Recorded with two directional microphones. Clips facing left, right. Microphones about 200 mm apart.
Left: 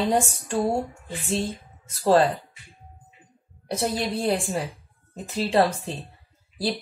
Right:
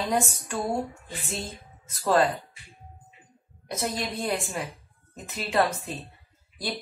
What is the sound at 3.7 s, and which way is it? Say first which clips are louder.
A woman's voice: left 5 dB; 30° left (ahead or behind).